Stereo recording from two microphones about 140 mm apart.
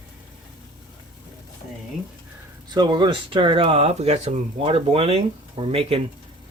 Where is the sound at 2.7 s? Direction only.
30° right (ahead or behind).